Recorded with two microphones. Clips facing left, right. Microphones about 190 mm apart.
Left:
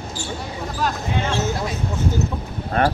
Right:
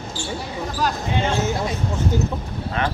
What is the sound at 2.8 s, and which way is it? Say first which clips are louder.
Speech: left 5 dB; 50° left (ahead or behind).